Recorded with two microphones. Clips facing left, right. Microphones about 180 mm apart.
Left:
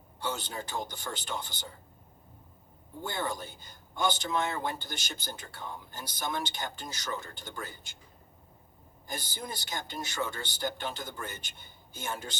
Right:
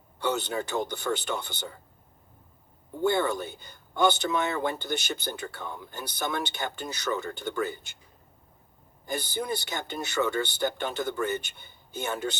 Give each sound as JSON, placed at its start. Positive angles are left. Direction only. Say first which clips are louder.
{"t": 0.2, "sound": "a man's voice", "louder": "right 7 dB", "side_deg": -65}
{"t": 3.0, "sound": "a man's voice", "louder": "right 9 dB", "side_deg": -65}
{"t": 9.1, "sound": "a man's voice", "louder": "right 9 dB", "side_deg": -65}